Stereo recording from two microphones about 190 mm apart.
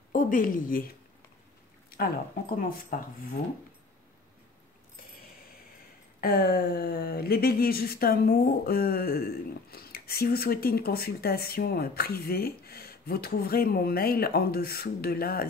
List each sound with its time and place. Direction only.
0.1 s a woman's voice: 45° left (ahead or behind)
2.9 s speech: 45° left (ahead or behind)
6.2 s speech: 55° left (ahead or behind)